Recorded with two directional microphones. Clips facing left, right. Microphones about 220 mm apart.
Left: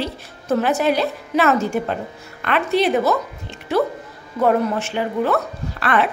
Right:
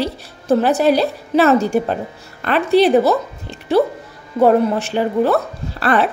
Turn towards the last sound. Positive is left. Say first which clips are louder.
# right 3 dB
turn(degrees=-35)  # may be behind; listen again after turning